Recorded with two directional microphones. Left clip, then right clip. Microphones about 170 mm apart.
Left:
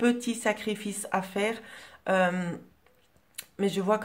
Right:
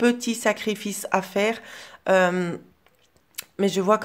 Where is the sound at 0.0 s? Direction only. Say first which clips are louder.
Right 5 dB; 30° right (ahead or behind).